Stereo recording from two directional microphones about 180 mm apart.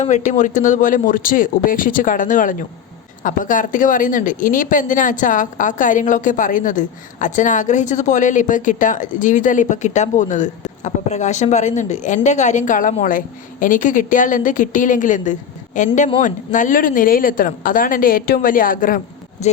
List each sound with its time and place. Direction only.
0.0 s speech: 45° left (ahead or behind)